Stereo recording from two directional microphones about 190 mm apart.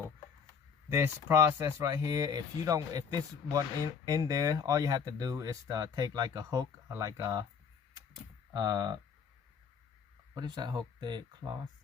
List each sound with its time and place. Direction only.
0.9 s speech: 15° right (ahead or behind)
8.5 s speech: 20° right (ahead or behind)
10.3 s speech: 20° right (ahead or behind)